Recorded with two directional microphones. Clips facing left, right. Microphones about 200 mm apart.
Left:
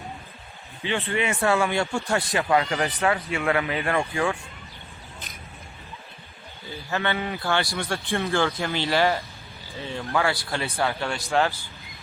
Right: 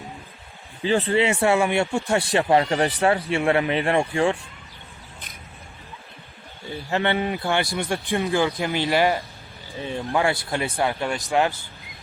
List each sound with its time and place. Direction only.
0.9 s speech: 35° right (ahead or behind)
6.9 s a man's voice: 25° right (ahead or behind)